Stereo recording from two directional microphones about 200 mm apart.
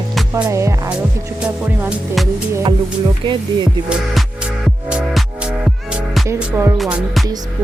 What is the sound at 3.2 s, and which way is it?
Speech, 20° right (ahead or behind).